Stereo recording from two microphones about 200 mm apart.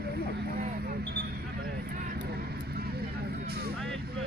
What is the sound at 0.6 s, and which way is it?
Vehicle, 50° right (ahead or behind).